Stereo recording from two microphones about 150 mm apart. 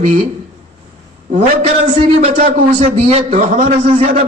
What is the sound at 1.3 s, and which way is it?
A man's voice, 50° right (ahead or behind).